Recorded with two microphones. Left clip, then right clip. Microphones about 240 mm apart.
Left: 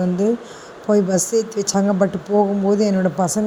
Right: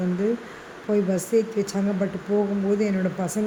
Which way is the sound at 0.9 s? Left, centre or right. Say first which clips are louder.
Left 5 dB; centre.